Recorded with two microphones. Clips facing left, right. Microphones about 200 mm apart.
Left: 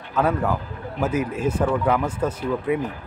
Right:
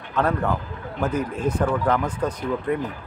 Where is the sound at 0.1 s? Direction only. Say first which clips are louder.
Left 1 dB; 5° left (ahead or behind).